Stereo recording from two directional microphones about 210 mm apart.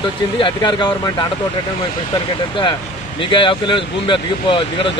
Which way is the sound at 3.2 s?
25° left (ahead or behind).